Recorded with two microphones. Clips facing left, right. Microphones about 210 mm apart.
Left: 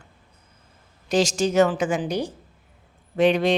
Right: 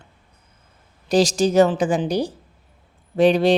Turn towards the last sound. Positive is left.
turn(degrees=-35)  # may be behind; listen again after turning